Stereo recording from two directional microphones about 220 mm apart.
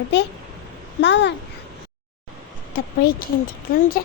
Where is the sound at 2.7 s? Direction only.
40° left (ahead or behind).